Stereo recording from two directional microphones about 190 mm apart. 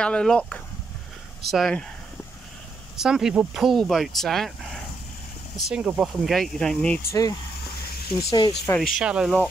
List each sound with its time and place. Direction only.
0.0 s speech: 5° left (ahead or behind)
3.0 s speech: 5° right (ahead or behind)
5.7 s speech: 5° right (ahead or behind)
7.1 s speech: 20° left (ahead or behind)
8.6 s speech: 5° left (ahead or behind)